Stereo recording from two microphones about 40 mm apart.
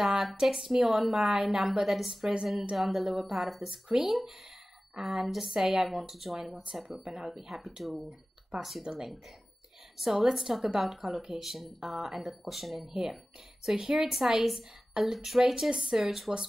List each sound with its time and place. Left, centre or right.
0.0 s a sound: centre
0.4 s a woman's voice: centre
3.7 s a woman's voice: centre
8.8 s a woman's voice: centre
9.9 s a woman's voice: centre
11.1 s a woman's voice: centre
11.3 s speech: centre
12.8 s a woman's voice: centre
16.0 s a woman's voice: centre